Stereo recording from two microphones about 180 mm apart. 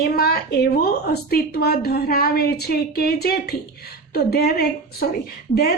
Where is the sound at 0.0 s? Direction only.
60° left (ahead or behind).